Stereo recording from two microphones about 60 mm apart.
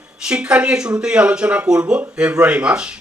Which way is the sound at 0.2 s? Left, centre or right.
Centre.